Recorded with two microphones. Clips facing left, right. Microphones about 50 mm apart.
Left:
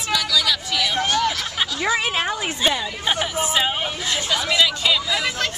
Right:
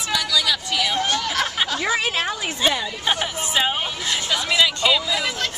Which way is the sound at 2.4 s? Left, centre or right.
Centre.